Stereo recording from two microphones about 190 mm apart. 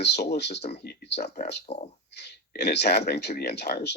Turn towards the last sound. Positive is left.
turn(degrees=60)  # may be behind; listen again after turning